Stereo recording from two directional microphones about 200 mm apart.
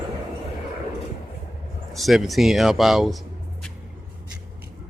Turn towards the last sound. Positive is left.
turn(degrees=0)  # may be behind; listen again after turning